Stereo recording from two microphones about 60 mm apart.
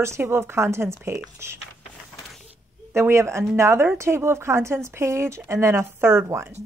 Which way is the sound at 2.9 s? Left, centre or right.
Right.